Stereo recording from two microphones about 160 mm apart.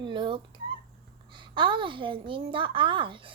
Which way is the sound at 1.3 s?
30° right (ahead or behind).